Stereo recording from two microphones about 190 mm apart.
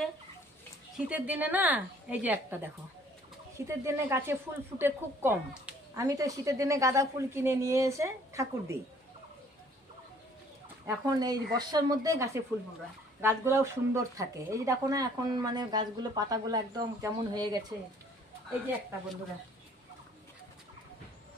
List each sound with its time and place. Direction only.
0.9 s a woman's voice: 5° right (ahead or behind)
10.9 s speech: 20° right (ahead or behind)